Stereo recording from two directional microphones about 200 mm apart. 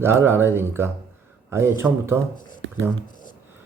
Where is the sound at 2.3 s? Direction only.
40° left (ahead or behind).